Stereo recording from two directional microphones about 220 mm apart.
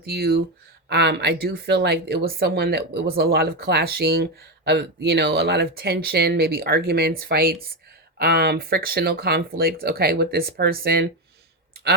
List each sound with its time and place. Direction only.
0.0 s speech: 45° right (ahead or behind)